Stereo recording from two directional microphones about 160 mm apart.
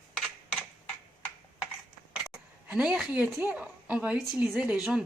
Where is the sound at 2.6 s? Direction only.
5° right (ahead or behind).